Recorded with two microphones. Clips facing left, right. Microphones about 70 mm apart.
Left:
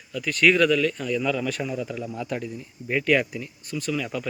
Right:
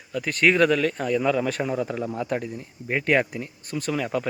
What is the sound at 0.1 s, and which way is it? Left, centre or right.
Speech, right.